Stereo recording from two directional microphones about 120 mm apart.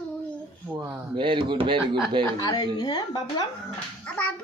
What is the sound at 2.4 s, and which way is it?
A woman's voice, 35° left (ahead or behind).